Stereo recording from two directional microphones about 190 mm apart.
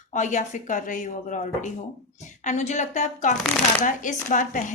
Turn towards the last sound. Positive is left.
turn(degrees=40)  # may be behind; listen again after turning